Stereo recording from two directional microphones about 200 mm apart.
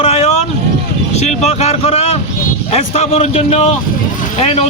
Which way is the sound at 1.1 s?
35° left (ahead or behind).